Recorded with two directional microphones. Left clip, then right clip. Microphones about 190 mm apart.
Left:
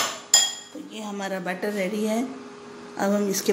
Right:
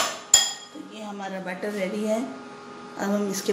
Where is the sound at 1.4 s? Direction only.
35° left (ahead or behind).